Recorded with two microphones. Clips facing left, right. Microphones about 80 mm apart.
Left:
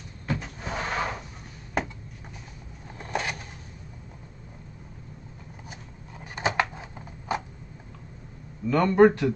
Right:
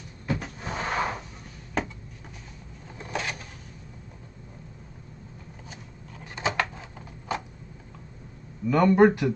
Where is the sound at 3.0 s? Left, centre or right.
Centre.